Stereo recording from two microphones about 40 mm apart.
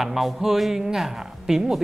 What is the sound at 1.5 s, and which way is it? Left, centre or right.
Speech, centre.